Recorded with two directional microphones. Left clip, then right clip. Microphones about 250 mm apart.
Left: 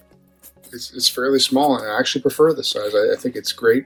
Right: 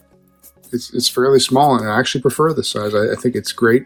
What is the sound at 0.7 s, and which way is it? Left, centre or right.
Speech, centre.